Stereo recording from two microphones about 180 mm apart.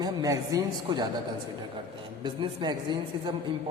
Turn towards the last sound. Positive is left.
turn(degrees=-25)  # may be behind; listen again after turning